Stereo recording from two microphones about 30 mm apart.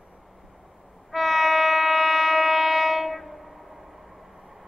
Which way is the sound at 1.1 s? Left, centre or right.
Centre.